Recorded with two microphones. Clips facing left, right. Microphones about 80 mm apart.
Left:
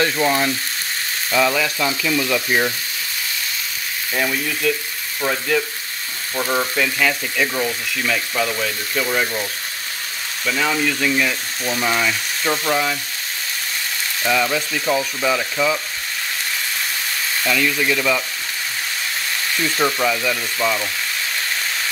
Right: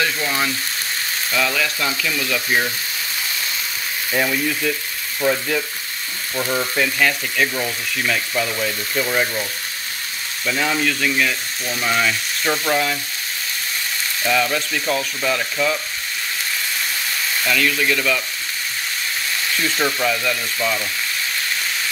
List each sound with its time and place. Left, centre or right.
0.0 s frying: left
1.3 s frying: centre
4.1 s frying: centre
6.4 s frying: left
6.8 s speech: centre
8.9 s frying: centre
10.4 s speech: centre
10.9 s frying: centre
11.6 s frying: left
11.9 s frying: centre
14.2 s frying: centre
17.4 s frying: centre
19.6 s frying: centre